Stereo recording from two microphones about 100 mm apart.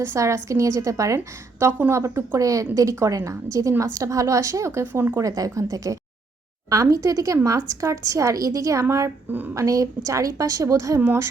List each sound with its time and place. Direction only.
0.0 s a woman's voice: 30° right (ahead or behind)
9.6 s a woman's voice: 35° right (ahead or behind)